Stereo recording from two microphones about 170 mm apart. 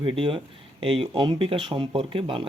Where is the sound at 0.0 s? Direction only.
30° right (ahead or behind).